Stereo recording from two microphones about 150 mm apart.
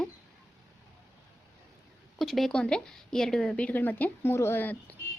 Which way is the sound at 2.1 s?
Centre (ahead or behind).